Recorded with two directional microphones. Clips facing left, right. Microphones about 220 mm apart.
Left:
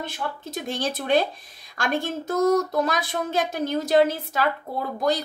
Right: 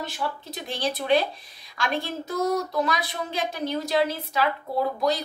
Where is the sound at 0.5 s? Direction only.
45° left (ahead or behind).